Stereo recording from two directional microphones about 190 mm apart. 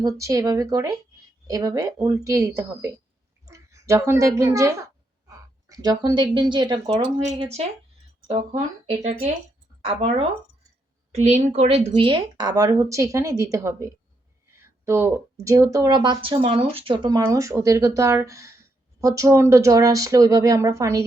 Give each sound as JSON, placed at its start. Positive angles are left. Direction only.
{"t": 0.2, "sound": "speech", "side_deg": -15}